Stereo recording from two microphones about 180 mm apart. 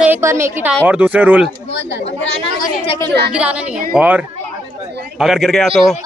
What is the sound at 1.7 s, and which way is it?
Speech, 75° left (ahead or behind).